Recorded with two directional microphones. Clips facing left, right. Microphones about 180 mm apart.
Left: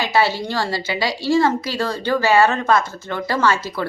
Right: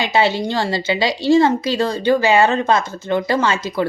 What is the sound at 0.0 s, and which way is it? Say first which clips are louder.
A woman's voice: right 2 dB; 20° right (ahead or behind).